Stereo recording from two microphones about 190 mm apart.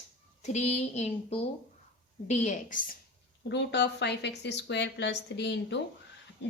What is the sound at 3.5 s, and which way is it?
A woman's voice, 65° left (ahead or behind).